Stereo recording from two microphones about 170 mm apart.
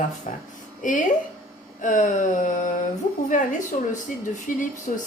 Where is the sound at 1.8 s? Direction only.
50° left (ahead or behind).